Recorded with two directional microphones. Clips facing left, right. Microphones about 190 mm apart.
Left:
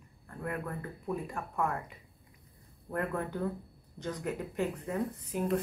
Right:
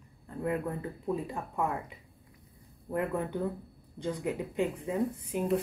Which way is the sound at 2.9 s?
15° right (ahead or behind).